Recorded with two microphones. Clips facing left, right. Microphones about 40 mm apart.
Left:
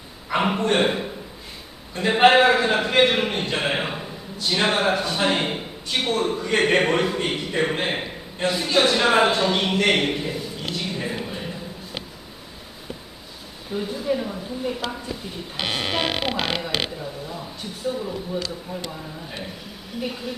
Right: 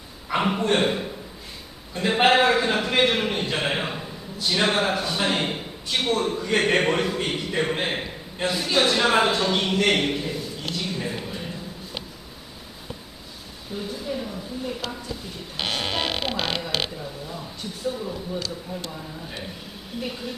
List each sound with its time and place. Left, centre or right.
0.3 s a sound: centre
2.0 s a man's voice: centre
13.7 s speech: centre